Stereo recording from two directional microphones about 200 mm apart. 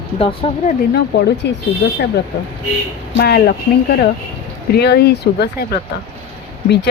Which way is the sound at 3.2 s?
55° left (ahead or behind).